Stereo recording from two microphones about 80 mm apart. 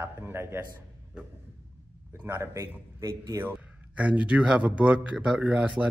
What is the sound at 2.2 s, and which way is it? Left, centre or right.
Speech, right.